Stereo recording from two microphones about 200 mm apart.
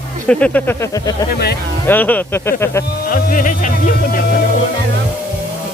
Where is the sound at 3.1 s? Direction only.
45° left (ahead or behind).